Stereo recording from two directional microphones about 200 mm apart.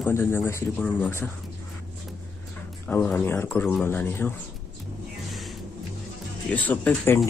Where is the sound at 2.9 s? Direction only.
10° left (ahead or behind).